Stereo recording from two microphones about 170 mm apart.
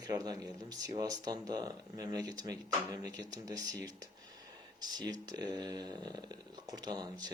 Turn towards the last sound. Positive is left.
turn(degrees=-25)  # may be behind; listen again after turning